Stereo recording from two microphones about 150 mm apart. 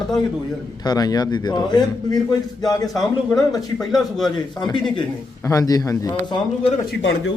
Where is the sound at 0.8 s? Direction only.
25° left (ahead or behind).